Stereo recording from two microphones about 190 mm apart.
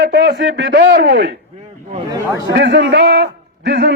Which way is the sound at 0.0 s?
60° right (ahead or behind).